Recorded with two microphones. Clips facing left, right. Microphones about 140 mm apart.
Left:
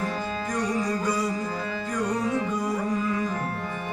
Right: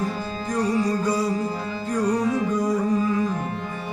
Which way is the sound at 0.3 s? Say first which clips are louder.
Right 3 dB; 30° right (ahead or behind).